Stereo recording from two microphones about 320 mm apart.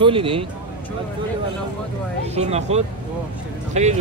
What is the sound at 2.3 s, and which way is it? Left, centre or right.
Speech, centre.